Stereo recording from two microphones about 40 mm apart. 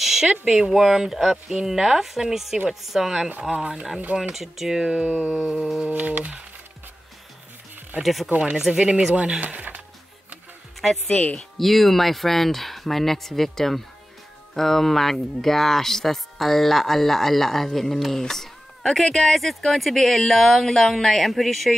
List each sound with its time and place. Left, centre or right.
0.0 s a sound: centre
0.3 s speech: centre
4.8 s a sound: right
5.3 s speech: centre
5.9 s speech: right
8.0 s speech: centre
9.1 s speech: right
11.1 s speech: left
11.3 s speech: centre